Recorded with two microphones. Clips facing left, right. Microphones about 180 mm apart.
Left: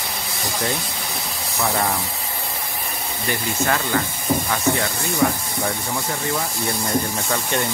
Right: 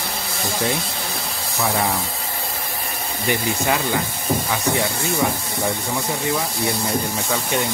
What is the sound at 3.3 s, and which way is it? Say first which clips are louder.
Speech: right 2 dB; 15° right (ahead or behind).